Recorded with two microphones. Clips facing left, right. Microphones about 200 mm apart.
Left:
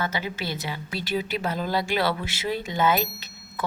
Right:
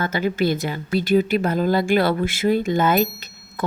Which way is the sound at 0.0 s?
50° right (ahead or behind).